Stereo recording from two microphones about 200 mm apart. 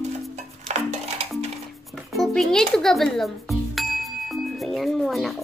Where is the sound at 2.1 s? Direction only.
Centre (ahead or behind).